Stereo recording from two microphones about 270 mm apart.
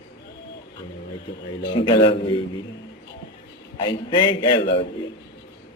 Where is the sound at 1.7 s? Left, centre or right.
Centre.